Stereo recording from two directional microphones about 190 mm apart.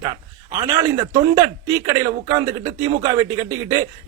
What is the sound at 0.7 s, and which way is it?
A man's voice, 15° right (ahead or behind).